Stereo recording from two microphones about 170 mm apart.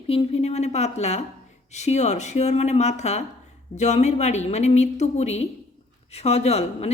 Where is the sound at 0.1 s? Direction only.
35° left (ahead or behind).